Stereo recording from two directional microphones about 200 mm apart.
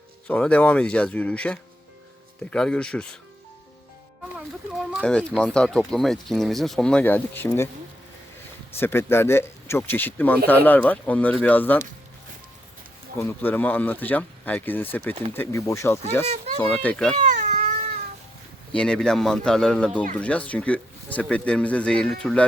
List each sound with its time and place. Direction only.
0.3 s speech: 5° left (ahead or behind)
4.4 s speech: 5° right (ahead or behind)
8.8 s speech: 10° left (ahead or behind)
13.1 s speech: 10° left (ahead or behind)
16.2 s speech: 30° right (ahead or behind)
16.6 s speech: 10° left (ahead or behind)
17.2 s cat: 40° right (ahead or behind)
18.7 s speech: 5° left (ahead or behind)